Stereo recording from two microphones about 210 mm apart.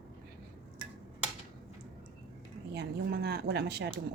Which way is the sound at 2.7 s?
50° right (ahead or behind).